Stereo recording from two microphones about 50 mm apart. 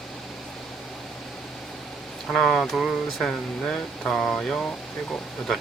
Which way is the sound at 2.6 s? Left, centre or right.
Centre.